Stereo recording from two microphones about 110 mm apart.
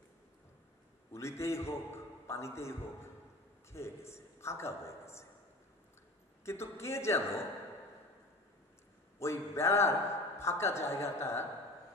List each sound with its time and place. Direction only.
1.1 s a man's voice: 25° left (ahead or behind)
6.4 s a man's voice: 25° left (ahead or behind)
9.2 s a man's voice: 25° left (ahead or behind)